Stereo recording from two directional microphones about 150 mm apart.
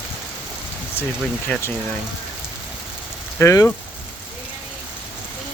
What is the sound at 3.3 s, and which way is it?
Speech, 20° left (ahead or behind).